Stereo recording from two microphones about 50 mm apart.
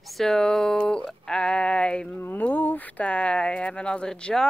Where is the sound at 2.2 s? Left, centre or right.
Left.